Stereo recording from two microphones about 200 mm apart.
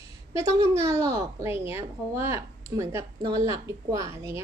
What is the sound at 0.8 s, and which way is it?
A woman's voice, 15° right (ahead or behind).